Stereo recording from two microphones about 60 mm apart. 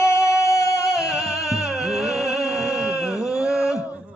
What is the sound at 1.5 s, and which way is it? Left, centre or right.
Music, centre.